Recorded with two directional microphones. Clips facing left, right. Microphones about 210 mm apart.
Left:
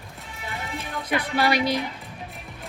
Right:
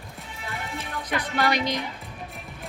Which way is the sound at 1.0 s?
10° left (ahead or behind).